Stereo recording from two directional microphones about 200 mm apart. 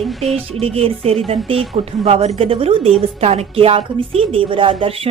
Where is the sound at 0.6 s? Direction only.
30° right (ahead or behind).